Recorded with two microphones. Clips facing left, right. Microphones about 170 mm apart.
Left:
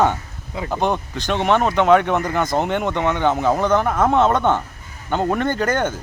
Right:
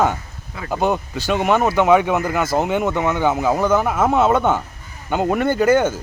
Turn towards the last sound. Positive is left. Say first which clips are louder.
# right 5 dB
turn(degrees=-10)  # may be behind; listen again after turning